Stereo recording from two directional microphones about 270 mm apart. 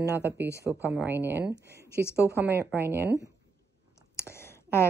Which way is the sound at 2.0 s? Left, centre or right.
Centre.